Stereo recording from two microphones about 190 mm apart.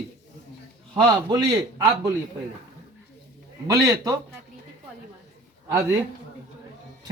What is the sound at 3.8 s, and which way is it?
Speech, 20° right (ahead or behind).